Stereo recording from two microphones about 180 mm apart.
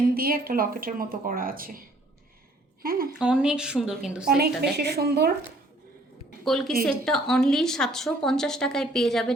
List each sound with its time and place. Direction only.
0.1 s speech: 55° right (ahead or behind)
2.8 s speech: 55° right (ahead or behind)
3.2 s a woman's voice: 5° right (ahead or behind)
4.4 s a woman's voice: 60° right (ahead or behind)
6.4 s a woman's voice: centre (ahead or behind)